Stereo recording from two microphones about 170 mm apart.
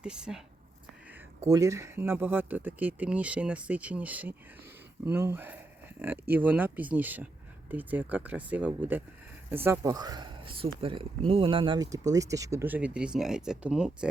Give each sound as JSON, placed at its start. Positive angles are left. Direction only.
{"t": 0.0, "sound": "speech", "side_deg": -5}
{"t": 1.5, "sound": "speech", "side_deg": -20}